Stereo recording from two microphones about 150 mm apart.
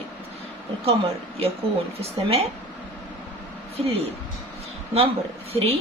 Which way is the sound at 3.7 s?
40° right (ahead or behind).